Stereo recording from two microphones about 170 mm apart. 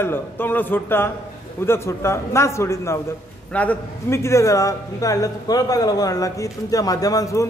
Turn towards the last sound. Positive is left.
turn(degrees=20)  # may be behind; listen again after turning